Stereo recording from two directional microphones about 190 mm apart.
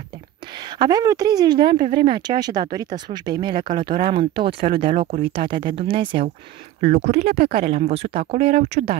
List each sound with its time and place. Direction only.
0.7 s speech: 20° right (ahead or behind)
6.8 s speech: 40° right (ahead or behind)